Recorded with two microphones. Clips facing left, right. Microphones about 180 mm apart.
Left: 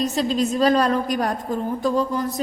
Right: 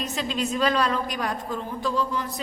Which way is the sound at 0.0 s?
40° left (ahead or behind).